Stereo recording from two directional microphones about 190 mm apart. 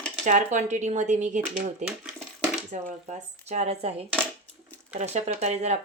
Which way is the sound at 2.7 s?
40° right (ahead or behind).